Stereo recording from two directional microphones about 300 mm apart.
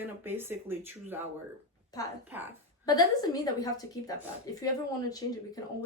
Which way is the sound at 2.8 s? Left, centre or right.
Centre.